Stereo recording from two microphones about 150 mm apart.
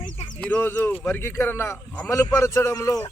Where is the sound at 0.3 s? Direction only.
10° left (ahead or behind).